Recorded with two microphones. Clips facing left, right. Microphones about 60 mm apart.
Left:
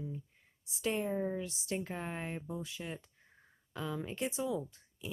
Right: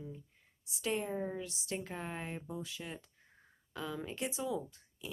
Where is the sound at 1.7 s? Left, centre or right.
Centre.